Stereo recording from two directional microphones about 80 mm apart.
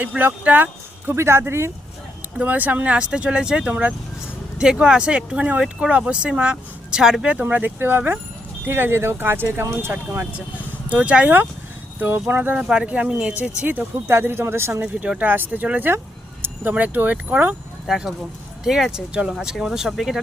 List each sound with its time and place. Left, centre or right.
0.0 s speech: right
1.1 s speech: right
2.4 s speech: right
7.4 s speech: right
12.5 s speech: centre; by 14.8 s right
14.9 s speech: centre
17.8 s speech: centre